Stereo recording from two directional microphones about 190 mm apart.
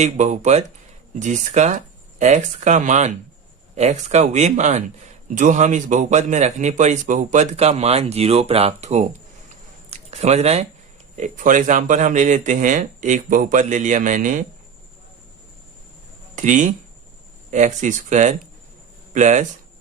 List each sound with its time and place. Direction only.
0.0 s speech: 35° right (ahead or behind)
9.5 s a sound: 35° right (ahead or behind)
11.2 s speech: 45° right (ahead or behind)
16.3 s speech: 40° right (ahead or behind)